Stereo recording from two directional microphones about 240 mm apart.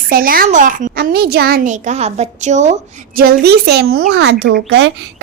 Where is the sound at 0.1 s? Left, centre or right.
Right.